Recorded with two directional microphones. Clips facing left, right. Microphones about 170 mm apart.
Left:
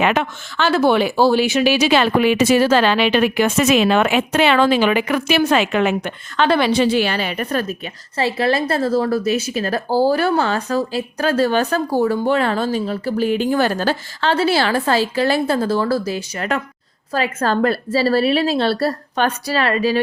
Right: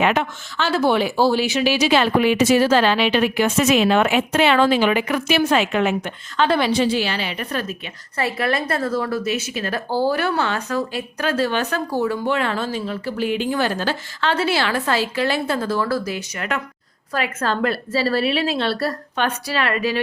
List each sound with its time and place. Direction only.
0.0 s speech: 80° left; by 7.8 s 45° left (ahead or behind)
8.1 s a woman's voice: 30° left (ahead or behind)